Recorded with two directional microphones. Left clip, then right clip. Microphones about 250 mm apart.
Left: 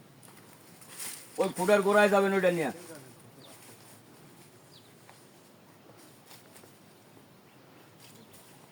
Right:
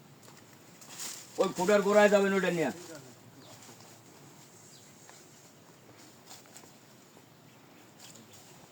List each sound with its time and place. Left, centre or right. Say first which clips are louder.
1.4 s speech: left 1 dB; centre